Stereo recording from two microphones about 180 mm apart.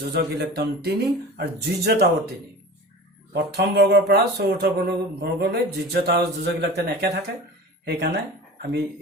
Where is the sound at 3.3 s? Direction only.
65° right (ahead or behind).